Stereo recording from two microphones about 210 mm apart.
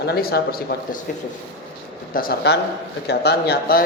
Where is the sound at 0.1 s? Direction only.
45° left (ahead or behind).